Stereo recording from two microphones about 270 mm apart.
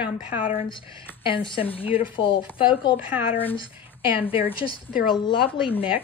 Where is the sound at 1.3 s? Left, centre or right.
Centre.